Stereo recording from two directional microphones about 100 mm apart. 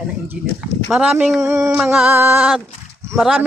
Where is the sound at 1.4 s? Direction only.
30° right (ahead or behind).